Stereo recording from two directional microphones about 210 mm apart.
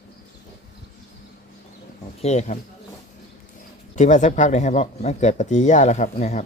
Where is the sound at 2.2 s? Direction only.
30° left (ahead or behind).